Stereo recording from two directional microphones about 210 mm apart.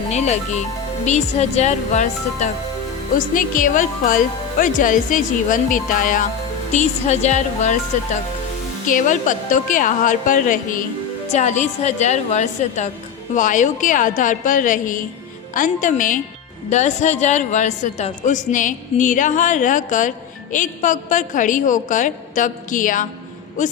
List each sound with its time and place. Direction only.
0.1 s a woman's voice: 35° left (ahead or behind)